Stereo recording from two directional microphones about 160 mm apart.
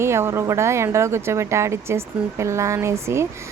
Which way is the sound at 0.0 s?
15° right (ahead or behind).